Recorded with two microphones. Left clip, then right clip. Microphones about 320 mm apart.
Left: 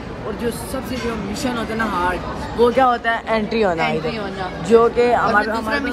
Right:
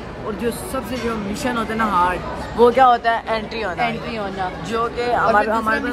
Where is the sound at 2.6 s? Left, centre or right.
Right.